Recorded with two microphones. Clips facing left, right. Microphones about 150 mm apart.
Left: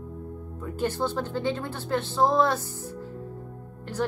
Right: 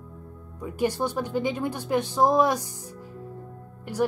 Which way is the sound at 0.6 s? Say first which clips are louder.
Right 2 dB; 10° right (ahead or behind).